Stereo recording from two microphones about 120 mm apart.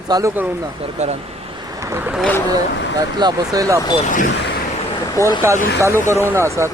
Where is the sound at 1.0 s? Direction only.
70° right (ahead or behind).